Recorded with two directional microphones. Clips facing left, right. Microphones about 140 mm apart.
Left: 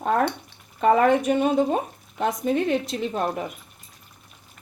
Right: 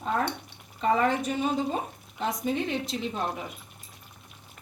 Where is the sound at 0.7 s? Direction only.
60° left (ahead or behind).